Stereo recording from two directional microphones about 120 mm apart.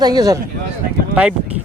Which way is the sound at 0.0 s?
35° right (ahead or behind).